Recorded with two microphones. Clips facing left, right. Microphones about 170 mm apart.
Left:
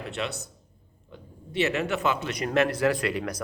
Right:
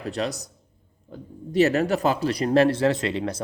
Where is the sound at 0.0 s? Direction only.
40° right (ahead or behind).